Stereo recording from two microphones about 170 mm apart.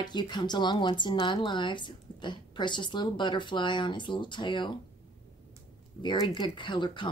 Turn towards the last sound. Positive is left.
turn(degrees=30)  # may be behind; listen again after turning